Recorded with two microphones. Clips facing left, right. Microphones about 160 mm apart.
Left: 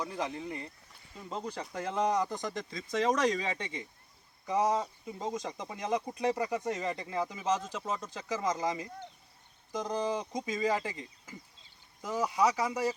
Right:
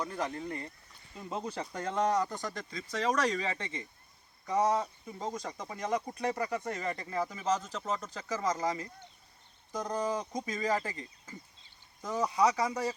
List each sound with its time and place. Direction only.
0.0 s speech: 10° left (ahead or behind)
1.1 s speech: 5° right (ahead or behind); by 12.9 s 10° left (ahead or behind)